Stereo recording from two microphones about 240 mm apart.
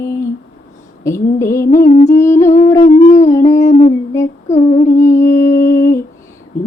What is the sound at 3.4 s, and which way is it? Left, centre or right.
Humming, left.